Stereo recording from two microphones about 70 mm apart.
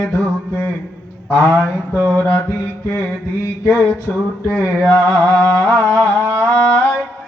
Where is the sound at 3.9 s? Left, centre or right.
Left.